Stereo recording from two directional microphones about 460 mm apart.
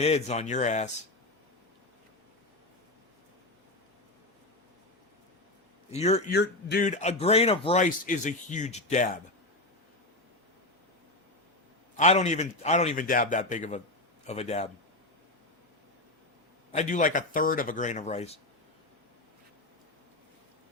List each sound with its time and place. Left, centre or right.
0.0 s a man's voice: centre
5.9 s a man's voice: centre
11.9 s a man's voice: centre
16.7 s a man's voice: centre